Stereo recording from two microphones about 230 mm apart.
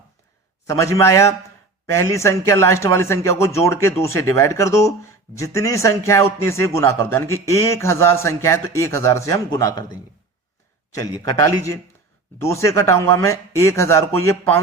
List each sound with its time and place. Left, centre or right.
0.7 s speech: centre
10.9 s speech: centre